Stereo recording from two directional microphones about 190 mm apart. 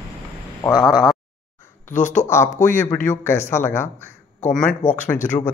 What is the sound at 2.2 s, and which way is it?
Speech, 15° left (ahead or behind).